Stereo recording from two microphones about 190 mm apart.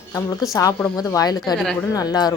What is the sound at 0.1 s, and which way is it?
Speech, 20° left (ahead or behind).